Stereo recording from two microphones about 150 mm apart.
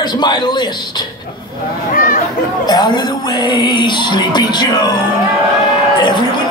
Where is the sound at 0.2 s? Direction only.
30° left (ahead or behind).